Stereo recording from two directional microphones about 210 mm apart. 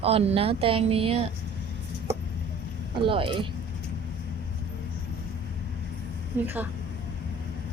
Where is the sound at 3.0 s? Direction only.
25° right (ahead or behind).